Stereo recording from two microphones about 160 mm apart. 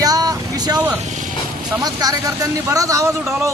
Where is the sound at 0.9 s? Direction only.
50° right (ahead or behind).